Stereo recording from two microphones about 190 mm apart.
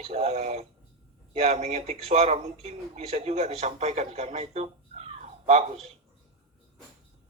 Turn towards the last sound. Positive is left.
turn(degrees=-35)  # may be behind; listen again after turning